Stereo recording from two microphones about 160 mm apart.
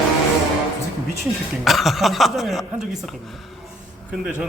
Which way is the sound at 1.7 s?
Centre (ahead or behind).